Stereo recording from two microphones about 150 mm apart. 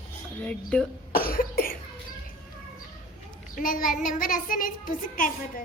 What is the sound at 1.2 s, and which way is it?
Cough, 75° left (ahead or behind).